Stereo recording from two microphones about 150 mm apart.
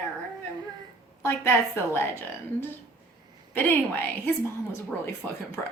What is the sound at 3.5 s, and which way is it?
Speech, 15° left (ahead or behind).